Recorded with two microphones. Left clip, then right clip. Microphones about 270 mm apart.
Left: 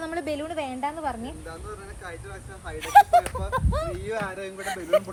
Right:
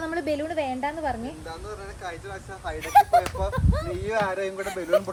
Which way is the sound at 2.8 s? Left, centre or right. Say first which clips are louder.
Left 2 dB; centre.